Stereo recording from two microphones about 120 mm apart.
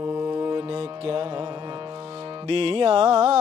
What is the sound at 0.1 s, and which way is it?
Mantra, 40° right (ahead or behind).